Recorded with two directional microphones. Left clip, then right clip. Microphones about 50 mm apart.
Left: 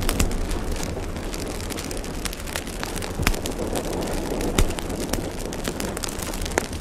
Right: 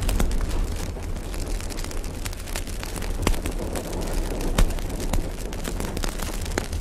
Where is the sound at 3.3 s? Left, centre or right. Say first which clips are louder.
Left 3 dB; left.